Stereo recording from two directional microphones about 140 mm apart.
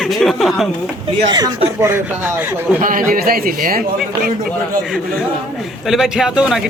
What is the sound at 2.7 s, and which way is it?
A man's voice, 80° right.